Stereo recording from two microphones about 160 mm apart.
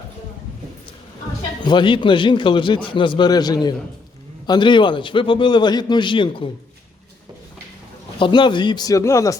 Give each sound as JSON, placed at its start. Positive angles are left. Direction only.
{"t": 1.6, "sound": "a man's voice", "side_deg": 30}
{"t": 8.2, "sound": "a man's voice", "side_deg": 30}